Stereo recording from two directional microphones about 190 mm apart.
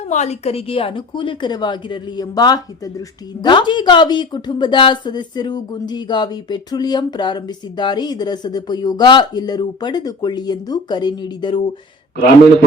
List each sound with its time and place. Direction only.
0.0 s speech: 35° left (ahead or behind)